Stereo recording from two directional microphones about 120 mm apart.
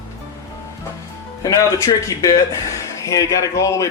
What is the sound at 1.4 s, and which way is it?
Speech, 25° left (ahead or behind).